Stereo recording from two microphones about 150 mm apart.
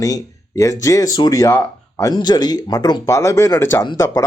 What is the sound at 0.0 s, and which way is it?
Speech, 20° left (ahead or behind).